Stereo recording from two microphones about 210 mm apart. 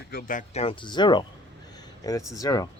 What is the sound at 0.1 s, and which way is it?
Speech, 40° left (ahead or behind).